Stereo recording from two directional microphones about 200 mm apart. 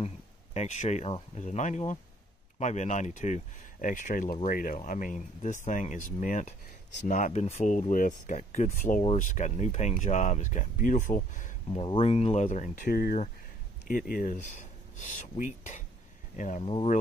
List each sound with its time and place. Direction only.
0.6 s speech: 35° left (ahead or behind)